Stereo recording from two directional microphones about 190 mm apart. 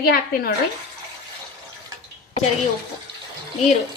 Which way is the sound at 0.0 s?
50° left (ahead or behind).